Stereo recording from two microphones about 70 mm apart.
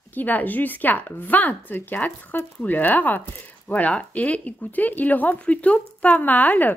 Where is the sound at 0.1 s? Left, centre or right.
Left.